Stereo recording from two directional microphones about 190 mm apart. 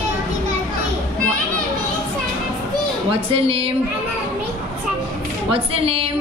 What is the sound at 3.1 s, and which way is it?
Speech, 30° right (ahead or behind).